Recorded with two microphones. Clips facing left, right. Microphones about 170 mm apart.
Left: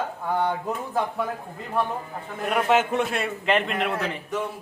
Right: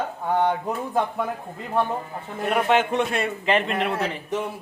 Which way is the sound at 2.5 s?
Centre (ahead or behind).